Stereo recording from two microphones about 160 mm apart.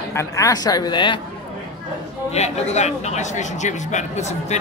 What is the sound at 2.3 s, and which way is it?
Speech, 45° left (ahead or behind).